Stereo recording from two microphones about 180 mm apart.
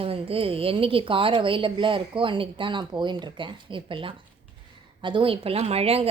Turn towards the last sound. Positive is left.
turn(degrees=-35)  # may be behind; listen again after turning